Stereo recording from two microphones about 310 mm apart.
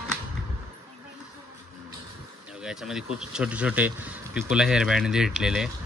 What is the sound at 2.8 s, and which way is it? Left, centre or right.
Speech, centre.